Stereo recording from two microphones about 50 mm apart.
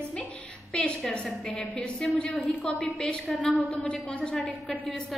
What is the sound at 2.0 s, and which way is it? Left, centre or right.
Speech, centre.